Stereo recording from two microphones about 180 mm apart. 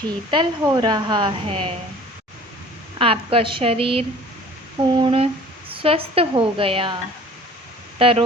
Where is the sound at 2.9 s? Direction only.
30° right (ahead or behind).